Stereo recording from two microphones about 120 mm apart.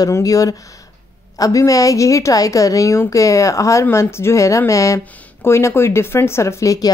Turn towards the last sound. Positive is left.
turn(degrees=30)  # may be behind; listen again after turning